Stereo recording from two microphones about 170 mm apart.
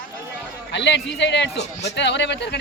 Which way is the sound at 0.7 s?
90° left.